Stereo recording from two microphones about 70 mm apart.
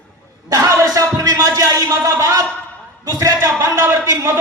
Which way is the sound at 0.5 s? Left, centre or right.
Right.